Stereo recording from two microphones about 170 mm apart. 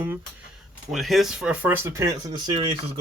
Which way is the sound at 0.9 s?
Centre (ahead or behind).